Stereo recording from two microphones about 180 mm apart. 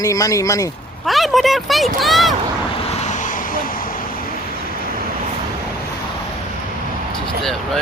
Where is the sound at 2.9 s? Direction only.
40° left (ahead or behind).